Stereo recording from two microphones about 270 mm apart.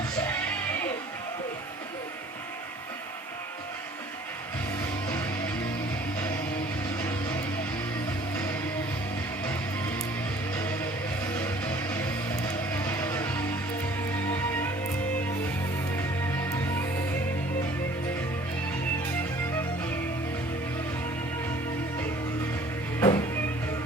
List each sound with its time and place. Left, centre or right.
0.2 s music: centre
4.8 s music: centre
11.3 s music: centre
23.0 s music: centre